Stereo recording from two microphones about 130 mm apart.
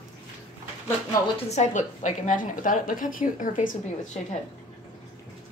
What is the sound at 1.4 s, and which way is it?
A woman's voice, 65° left (ahead or behind).